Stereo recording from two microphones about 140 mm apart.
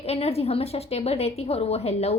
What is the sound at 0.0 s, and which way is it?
A woman's voice, 45° left (ahead or behind).